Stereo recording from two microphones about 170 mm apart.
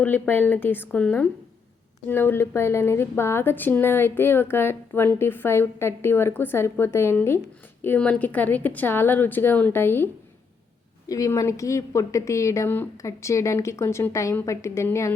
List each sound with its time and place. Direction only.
0.0 s a woman's voice: 10° left (ahead or behind)
11.1 s a woman's voice: 20° left (ahead or behind)